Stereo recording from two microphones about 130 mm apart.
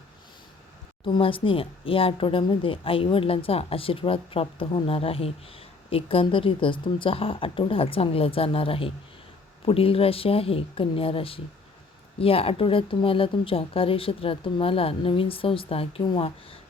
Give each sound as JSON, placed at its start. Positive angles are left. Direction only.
{"t": 1.0, "sound": "speech", "side_deg": 40}